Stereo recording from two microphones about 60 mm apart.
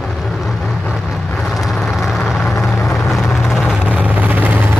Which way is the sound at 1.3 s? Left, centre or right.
Centre.